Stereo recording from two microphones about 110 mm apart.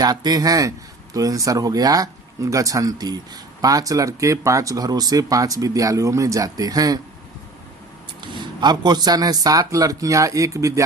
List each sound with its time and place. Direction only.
0.0 s speech: 40° right (ahead or behind)
8.2 s speech: 45° right (ahead or behind); by 10.8 s 30° right (ahead or behind)